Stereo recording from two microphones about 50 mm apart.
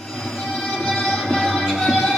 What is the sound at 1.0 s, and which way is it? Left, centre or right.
Music, centre.